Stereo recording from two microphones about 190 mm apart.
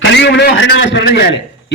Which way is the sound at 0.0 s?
65° left (ahead or behind).